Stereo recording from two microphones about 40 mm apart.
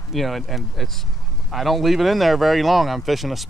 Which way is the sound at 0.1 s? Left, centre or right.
Centre.